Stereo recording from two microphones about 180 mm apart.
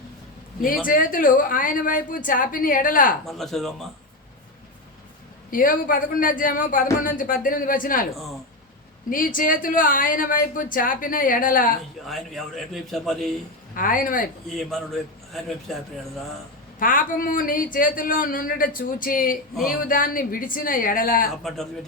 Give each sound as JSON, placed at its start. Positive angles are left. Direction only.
{"t": 0.9, "sound": "a woman's voice", "side_deg": 50}
{"t": 3.2, "sound": "a man's voice", "side_deg": 0}
{"t": 5.5, "sound": "a woman's voice", "side_deg": 50}
{"t": 8.1, "sound": "a man's voice", "side_deg": 0}
{"t": 9.0, "sound": "a woman's voice", "side_deg": 50}
{"t": 12.0, "sound": "a man's voice", "side_deg": 0}
{"t": 13.7, "sound": "a woman's voice", "side_deg": 50}
{"t": 14.5, "sound": "a man's voice", "side_deg": 0}
{"t": 16.8, "sound": "a woman's voice", "side_deg": 50}
{"t": 21.4, "sound": "a man's voice", "side_deg": 0}